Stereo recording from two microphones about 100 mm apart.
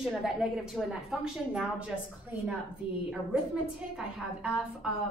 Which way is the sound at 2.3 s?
20° right (ahead or behind).